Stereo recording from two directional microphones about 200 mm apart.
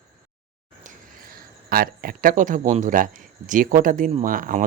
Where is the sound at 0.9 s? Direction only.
45° right (ahead or behind).